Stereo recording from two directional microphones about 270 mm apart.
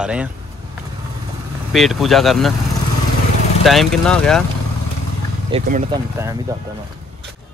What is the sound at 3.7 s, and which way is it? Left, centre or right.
Speech, centre.